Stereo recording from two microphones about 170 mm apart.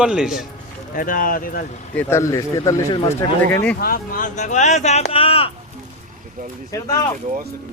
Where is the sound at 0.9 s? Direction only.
55° left (ahead or behind).